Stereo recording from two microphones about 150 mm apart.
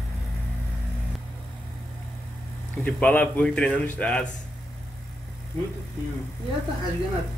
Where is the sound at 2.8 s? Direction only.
10° left (ahead or behind).